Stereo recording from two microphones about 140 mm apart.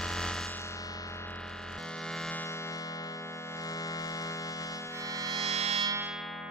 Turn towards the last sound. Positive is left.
turn(degrees=-50)  # may be behind; listen again after turning